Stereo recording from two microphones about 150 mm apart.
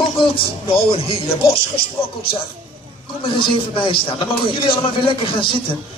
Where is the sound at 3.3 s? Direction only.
35° left (ahead or behind).